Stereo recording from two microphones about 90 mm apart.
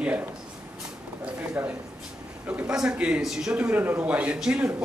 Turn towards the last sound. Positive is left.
turn(degrees=-10)  # may be behind; listen again after turning